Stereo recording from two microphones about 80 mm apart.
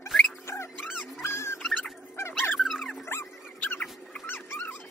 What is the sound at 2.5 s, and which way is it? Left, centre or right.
Dog, centre.